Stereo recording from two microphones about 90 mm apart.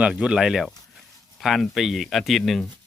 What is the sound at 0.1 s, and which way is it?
Speech, 10° right (ahead or behind).